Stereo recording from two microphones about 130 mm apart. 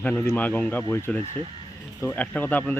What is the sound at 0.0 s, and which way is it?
Speech, 10° left (ahead or behind).